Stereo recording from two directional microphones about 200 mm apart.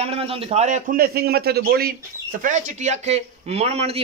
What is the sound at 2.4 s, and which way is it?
A man's voice, 40° right (ahead or behind).